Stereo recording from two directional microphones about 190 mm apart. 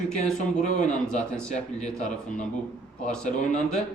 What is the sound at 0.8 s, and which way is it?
Speech, 5° left (ahead or behind).